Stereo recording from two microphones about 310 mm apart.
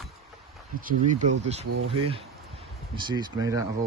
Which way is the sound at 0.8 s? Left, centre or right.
Right.